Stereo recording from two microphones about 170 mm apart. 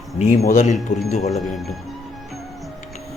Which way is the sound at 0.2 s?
40° left (ahead or behind).